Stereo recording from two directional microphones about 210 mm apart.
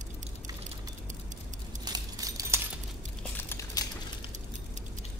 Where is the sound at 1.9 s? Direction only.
20° right (ahead or behind).